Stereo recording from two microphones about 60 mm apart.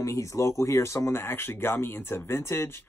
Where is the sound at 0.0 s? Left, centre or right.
Left.